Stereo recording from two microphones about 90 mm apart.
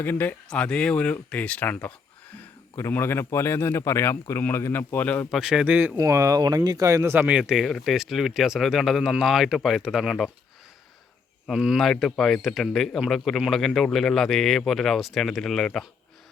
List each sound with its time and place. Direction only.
0.0 s speech: 20° left (ahead or behind)
2.7 s speech: 30° left (ahead or behind)
5.3 s a man's voice: 5° right (ahead or behind)
5.7 s speech: 20° right (ahead or behind)
6.0 s speech: 35° right (ahead or behind)
7.3 s a man's voice: 10° right (ahead or behind)
11.4 s a man's voice: 5° right (ahead or behind)